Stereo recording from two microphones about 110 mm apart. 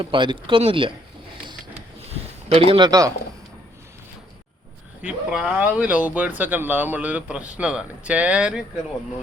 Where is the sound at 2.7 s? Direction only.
40° right (ahead or behind).